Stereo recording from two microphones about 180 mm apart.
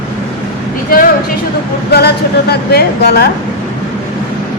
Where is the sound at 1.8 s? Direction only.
65° left (ahead or behind).